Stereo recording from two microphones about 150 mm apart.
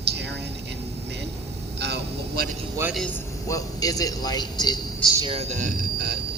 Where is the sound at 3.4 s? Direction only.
25° left (ahead or behind).